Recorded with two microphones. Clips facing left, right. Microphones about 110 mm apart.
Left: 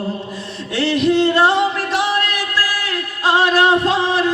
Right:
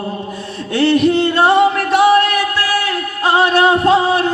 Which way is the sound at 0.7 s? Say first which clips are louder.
Right 3 dB; 55° right (ahead or behind).